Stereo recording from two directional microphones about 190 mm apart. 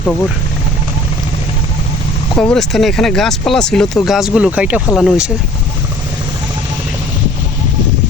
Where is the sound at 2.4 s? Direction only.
Centre (ahead or behind).